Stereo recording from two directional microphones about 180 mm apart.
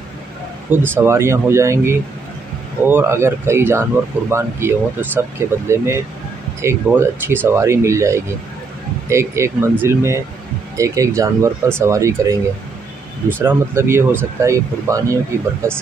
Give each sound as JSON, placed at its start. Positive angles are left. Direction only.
{"t": 0.7, "sound": "speech", "side_deg": -10}
{"t": 13.4, "sound": "speech", "side_deg": -15}